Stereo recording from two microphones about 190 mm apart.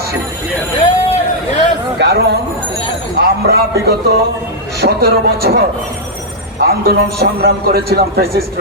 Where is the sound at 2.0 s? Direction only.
60° right (ahead or behind).